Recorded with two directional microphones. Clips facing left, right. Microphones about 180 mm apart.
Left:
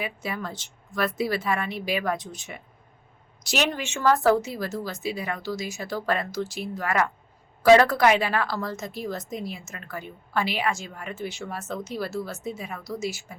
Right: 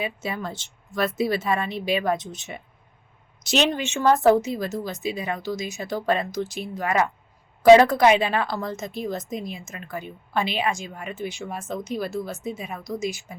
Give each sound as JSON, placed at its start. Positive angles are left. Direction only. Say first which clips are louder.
{"t": 0.0, "sound": "speech", "louder": "right 2 dB", "side_deg": -25}